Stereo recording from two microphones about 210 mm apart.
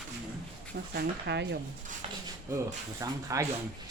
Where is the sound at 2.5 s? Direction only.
15° right (ahead or behind).